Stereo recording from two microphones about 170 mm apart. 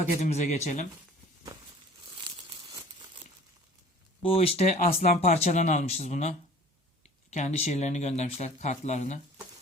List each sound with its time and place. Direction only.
0.2 s speech: 45° left (ahead or behind)
4.2 s speech: 35° left (ahead or behind)
4.8 s speech: 55° left (ahead or behind)
5.3 s speech: 40° left (ahead or behind)